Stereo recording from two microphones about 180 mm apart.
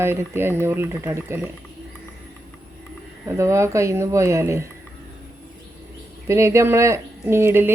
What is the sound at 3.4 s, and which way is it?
Mantra, 15° right (ahead or behind).